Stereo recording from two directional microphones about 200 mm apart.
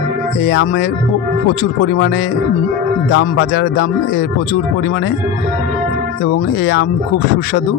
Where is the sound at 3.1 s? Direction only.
50° left (ahead or behind).